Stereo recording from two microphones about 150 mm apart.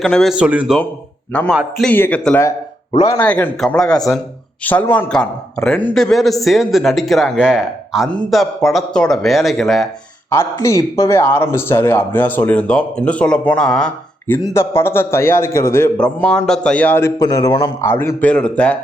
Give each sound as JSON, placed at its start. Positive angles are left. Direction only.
{"t": 0.0, "sound": "a man's voice", "side_deg": 0}
{"t": 1.3, "sound": "speech", "side_deg": 10}
{"t": 2.9, "sound": "speech", "side_deg": 25}
{"t": 3.2, "sound": "a man's voice", "side_deg": 10}
{"t": 10.2, "sound": "speech", "side_deg": 15}
{"t": 16.0, "sound": "speech", "side_deg": 5}